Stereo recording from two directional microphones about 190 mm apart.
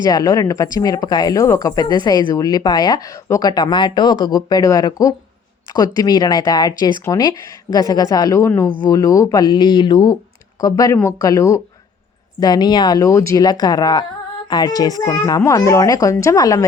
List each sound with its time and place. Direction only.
0.0 s speech: 20° left (ahead or behind)